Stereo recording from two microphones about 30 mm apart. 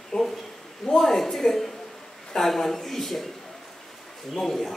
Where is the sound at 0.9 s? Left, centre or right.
Centre.